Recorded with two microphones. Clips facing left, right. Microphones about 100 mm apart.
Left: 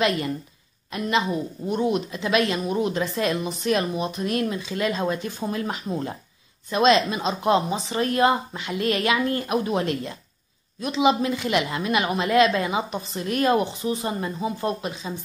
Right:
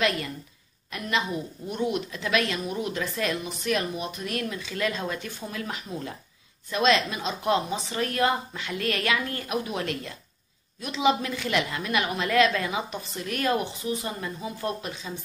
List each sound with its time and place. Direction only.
0.9 s a woman's voice: 30° left (ahead or behind)